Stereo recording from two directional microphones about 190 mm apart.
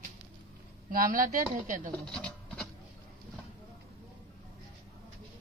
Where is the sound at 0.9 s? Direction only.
50° right (ahead or behind).